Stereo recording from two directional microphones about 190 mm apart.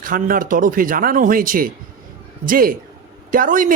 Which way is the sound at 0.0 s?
45° right (ahead or behind).